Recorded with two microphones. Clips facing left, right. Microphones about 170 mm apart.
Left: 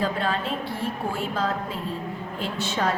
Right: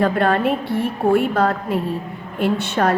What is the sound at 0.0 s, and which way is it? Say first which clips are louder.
A woman's voice: right 9 dB; 60° right (ahead or behind).